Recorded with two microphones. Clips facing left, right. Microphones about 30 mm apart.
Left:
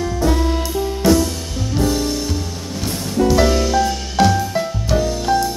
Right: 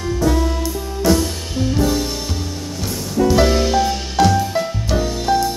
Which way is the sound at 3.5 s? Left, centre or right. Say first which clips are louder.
Even; right.